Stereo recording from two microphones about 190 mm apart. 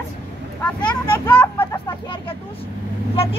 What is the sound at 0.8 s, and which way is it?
Speech, 25° left (ahead or behind).